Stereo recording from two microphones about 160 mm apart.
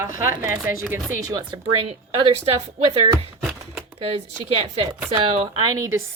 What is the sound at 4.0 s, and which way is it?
Speech, 40° right (ahead or behind).